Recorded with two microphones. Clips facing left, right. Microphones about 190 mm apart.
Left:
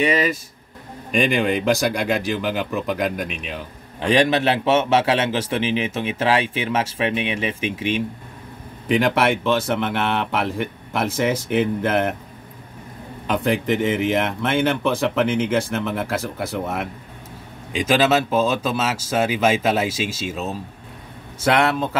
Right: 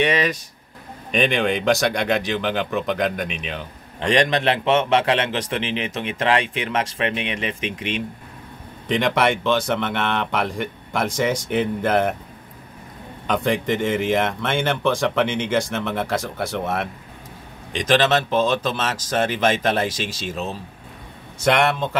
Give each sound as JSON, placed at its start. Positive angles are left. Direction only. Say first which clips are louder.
{"t": 0.0, "sound": "speech", "louder": "left 1 dB", "side_deg": 5}
{"t": 13.3, "sound": "speech", "louder": "left 1 dB", "side_deg": 5}